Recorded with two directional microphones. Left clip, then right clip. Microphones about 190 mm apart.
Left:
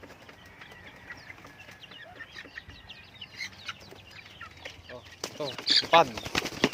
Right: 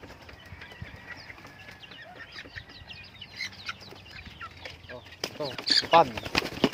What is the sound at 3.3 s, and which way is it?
Chicken, 10° right (ahead or behind).